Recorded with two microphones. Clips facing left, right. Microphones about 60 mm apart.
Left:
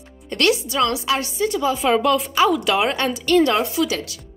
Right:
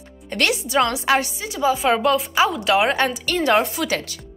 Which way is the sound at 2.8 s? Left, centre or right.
Right.